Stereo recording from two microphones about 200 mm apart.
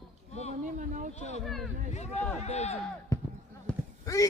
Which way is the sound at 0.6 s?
40° right (ahead or behind).